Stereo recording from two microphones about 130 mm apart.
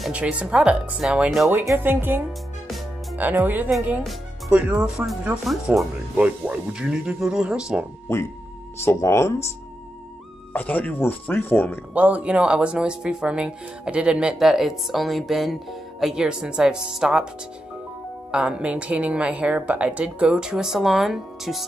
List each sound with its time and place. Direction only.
0.0 s speech: 10° right (ahead or behind)
1.5 s speech: 15° right (ahead or behind)
8.8 s speech: 20° left (ahead or behind)
10.5 s speech: 10° left (ahead or behind)
11.9 s speech: 10° right (ahead or behind)
18.3 s speech: 5° right (ahead or behind)